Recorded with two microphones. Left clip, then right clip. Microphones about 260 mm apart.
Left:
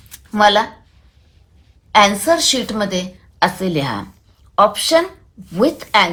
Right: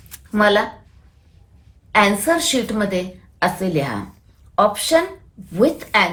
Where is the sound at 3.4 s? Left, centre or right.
Centre.